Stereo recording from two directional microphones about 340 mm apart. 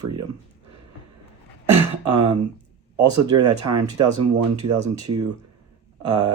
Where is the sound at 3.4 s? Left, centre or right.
Right.